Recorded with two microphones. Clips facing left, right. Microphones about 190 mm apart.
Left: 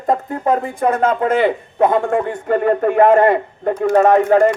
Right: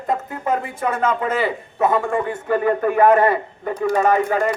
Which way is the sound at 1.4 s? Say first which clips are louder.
Left 5 dB; 55° left (ahead or behind).